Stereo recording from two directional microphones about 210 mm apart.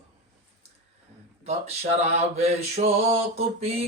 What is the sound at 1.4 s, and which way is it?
Mantra, 30° right (ahead or behind).